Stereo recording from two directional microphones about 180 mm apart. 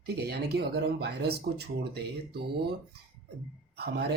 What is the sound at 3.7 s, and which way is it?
Speech, 65° right (ahead or behind).